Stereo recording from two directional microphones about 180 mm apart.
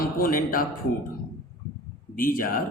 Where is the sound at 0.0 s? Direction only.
50° left (ahead or behind).